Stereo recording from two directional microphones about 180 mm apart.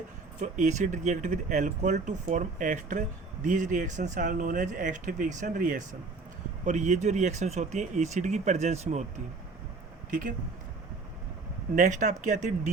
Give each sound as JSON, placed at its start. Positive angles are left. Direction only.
{"t": 0.4, "sound": "speech", "side_deg": -45}
{"t": 11.7, "sound": "speech", "side_deg": -45}